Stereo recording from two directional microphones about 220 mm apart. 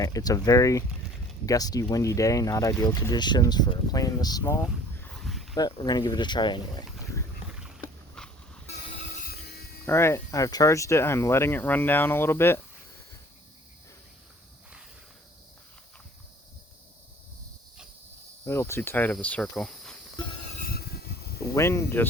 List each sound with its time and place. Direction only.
0.0 s speech: 15° left (ahead or behind)
4.9 s a sound: 5° left (ahead or behind)
5.5 s speech: 20° left (ahead or behind)
7.5 s a sound: centre (ahead or behind)
9.2 s music: 45° left (ahead or behind)
9.8 s speech: 10° left (ahead or behind)
18.4 s speech: 10° left (ahead or behind)
20.6 s a sound: 45° left (ahead or behind)
21.5 s speech: 15° left (ahead or behind)